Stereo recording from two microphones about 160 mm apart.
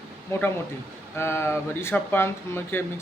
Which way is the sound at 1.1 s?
15° left (ahead or behind).